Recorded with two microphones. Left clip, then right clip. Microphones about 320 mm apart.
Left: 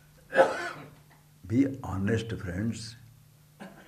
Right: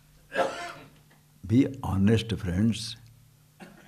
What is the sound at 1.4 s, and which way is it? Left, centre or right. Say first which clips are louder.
Speech: right 2 dB; right.